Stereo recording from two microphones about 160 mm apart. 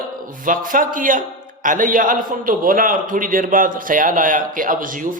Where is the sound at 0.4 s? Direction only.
60° right (ahead or behind).